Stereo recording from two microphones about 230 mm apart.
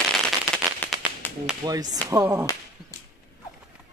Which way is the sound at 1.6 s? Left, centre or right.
Centre.